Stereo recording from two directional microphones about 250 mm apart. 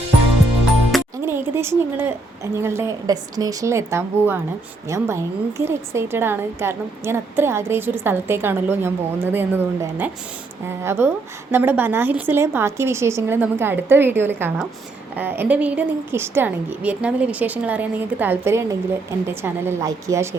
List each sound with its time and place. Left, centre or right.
0.9 s a woman's voice: centre